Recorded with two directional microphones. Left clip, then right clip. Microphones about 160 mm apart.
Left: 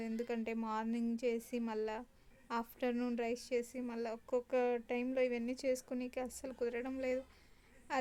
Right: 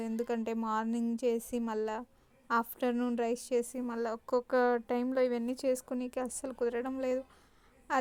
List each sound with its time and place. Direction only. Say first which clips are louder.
0.0 s a woman's voice: right 6 dB; 25° right (ahead or behind)